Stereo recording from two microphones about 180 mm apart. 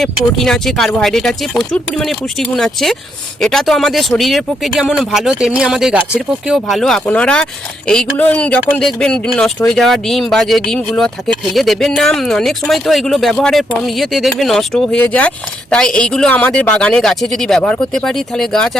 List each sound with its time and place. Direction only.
0.0 s speech: centre (ahead or behind)